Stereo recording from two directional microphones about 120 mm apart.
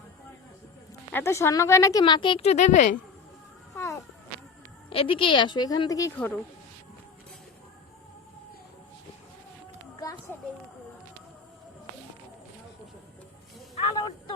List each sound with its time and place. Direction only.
1.1 s speech: 20° left (ahead or behind); by 2.4 s 40° left (ahead or behind)
2.4 s speech: 70° left (ahead or behind); by 3.0 s 90° left
4.9 s a woman's voice: 50° left (ahead or behind); by 6.1 s 30° left (ahead or behind)
6.1 s speech: 10° left (ahead or behind)
10.0 s children playing: 30° left (ahead or behind)
13.9 s a sound: 40° left (ahead or behind)